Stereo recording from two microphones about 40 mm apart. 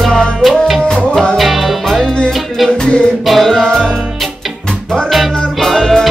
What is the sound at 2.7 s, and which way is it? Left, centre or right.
Music, left.